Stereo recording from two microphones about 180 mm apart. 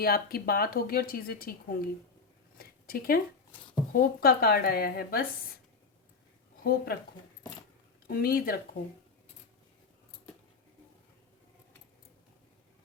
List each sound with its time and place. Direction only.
0.0 s speech: 55° left (ahead or behind)
2.6 s a sound: 55° left (ahead or behind)
3.9 s speech: 55° left (ahead or behind)
6.6 s speech: 55° left (ahead or behind)
8.0 s speech: 55° left (ahead or behind)